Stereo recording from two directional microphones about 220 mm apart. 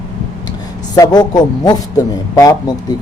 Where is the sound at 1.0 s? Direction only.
20° left (ahead or behind).